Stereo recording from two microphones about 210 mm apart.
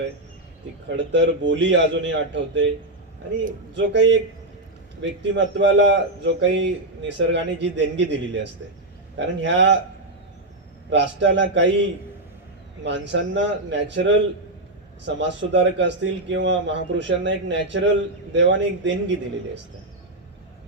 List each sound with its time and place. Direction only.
0.9 s a man's voice: 55° right (ahead or behind)
3.8 s a man's voice: 55° right (ahead or behind)
10.8 s a man's voice: 60° right (ahead or behind)